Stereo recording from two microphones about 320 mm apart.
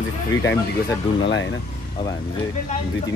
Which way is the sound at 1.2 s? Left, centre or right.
Left.